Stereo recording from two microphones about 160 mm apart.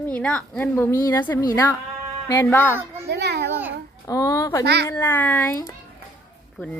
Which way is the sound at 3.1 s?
90° right.